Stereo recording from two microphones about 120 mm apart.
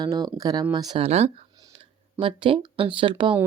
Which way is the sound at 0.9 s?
55° right (ahead or behind).